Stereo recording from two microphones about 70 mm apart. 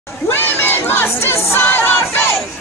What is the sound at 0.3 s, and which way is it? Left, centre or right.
Crowd, left.